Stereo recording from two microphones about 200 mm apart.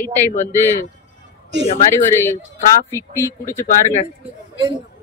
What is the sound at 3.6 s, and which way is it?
Speech, 35° left (ahead or behind).